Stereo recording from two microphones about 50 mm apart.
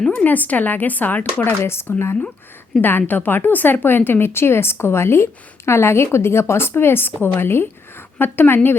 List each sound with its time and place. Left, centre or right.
0.3 s speech: left
1.6 s speech: left
2.8 s a woman's voice: left